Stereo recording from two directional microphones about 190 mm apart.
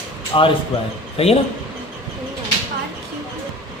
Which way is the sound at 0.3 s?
25° left (ahead or behind).